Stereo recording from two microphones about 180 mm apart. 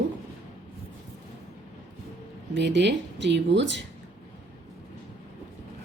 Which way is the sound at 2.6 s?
75° right (ahead or behind).